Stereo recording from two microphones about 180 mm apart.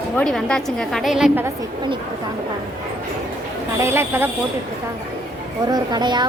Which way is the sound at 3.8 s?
15° right (ahead or behind).